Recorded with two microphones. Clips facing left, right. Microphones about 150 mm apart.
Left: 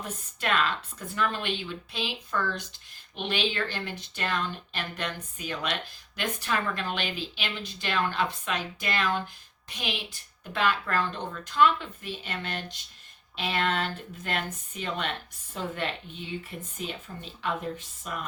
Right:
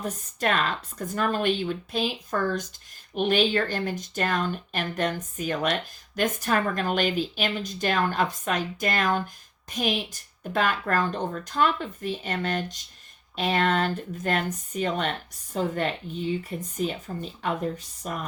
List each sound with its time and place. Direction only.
0.0 s speech: 45° right (ahead or behind)